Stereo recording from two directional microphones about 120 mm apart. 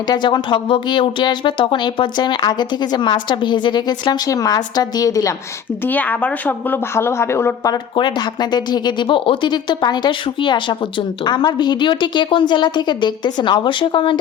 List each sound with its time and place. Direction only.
0.1 s a woman's voice: 40° left (ahead or behind)
5.8 s a woman's voice: 15° left (ahead or behind)
7.9 s a woman's voice: 40° left (ahead or behind)